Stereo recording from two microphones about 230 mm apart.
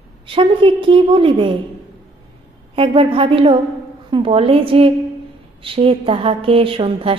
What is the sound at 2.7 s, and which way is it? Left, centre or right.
A woman's voice, right.